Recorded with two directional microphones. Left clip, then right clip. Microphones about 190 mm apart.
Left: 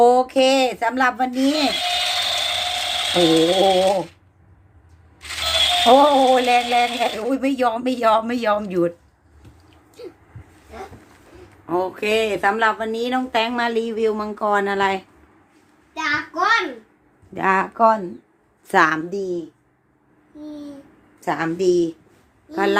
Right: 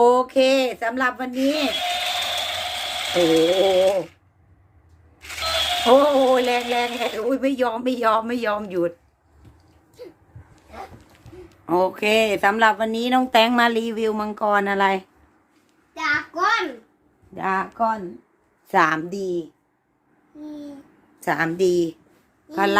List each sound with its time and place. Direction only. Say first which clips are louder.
0.0 s speech: left 2 dB; 5° right (ahead or behind)
1.7 s ratchet: left 3 dB; 10° right (ahead or behind)
5.3 s speech: left 4 dB; centre (ahead or behind)
10.0 s a sound: left 3 dB; 15° left (ahead or behind)
11.6 s speech: right 2 dB; 40° right (ahead or behind)
17.3 s speech: left 5 dB; 10° left (ahead or behind)
18.7 s a woman's voice: left 2 dB; 10° right (ahead or behind)
20.4 s a woman's voice: left 1 dB; 10° right (ahead or behind)
21.2 s speech: right 1 dB; 35° right (ahead or behind)
22.5 s a woman's voice: even; 25° right (ahead or behind)